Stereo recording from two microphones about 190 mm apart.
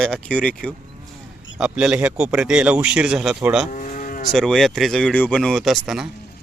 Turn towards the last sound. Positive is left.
turn(degrees=0)  # may be behind; listen again after turning